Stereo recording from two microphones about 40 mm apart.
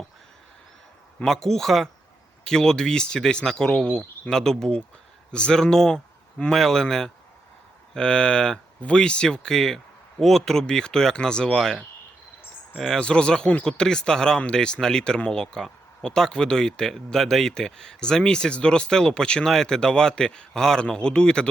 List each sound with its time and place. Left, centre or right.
1.2 s speech: centre
13.0 s speech: left
13.7 s speech: centre